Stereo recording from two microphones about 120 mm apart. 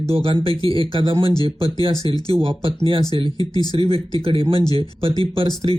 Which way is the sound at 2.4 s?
50° right (ahead or behind).